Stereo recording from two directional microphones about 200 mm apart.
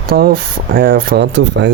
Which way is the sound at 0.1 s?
50° right (ahead or behind).